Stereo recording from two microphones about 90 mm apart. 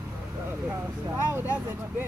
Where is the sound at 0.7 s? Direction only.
25° right (ahead or behind).